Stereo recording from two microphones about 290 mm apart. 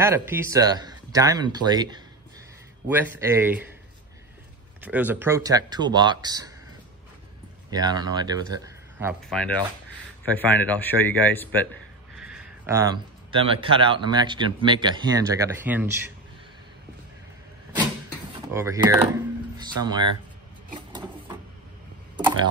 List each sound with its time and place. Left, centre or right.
0.0 s a man's voice: centre
4.8 s a man's voice: centre
7.7 s speech: centre
9.3 s a man's voice: centre
18.5 s a man's voice: centre
20.9 s printer: centre
22.1 s a sound: centre